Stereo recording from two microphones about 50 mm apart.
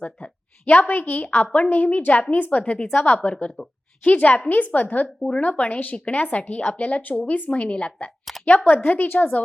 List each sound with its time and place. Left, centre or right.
0.0 s a woman's voice: left
3.6 s a woman's voice: centre
4.0 s a woman's voice: left
8.4 s a woman's voice: left